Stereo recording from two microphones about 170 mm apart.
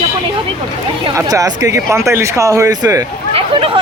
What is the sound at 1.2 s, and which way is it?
Speech, 20° right (ahead or behind).